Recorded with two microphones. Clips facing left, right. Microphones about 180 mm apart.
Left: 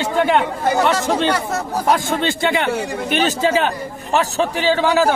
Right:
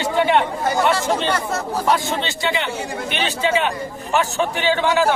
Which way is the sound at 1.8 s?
50° left (ahead or behind).